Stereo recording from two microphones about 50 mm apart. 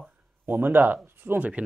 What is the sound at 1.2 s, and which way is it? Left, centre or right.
Speech, right.